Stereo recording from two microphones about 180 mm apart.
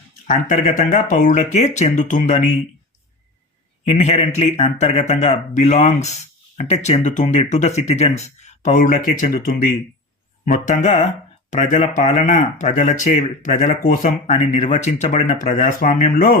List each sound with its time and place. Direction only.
0.3 s speech: 45° left (ahead or behind)
3.8 s speech: 40° left (ahead or behind)